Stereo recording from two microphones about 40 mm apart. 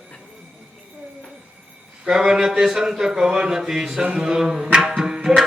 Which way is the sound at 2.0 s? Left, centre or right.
Centre.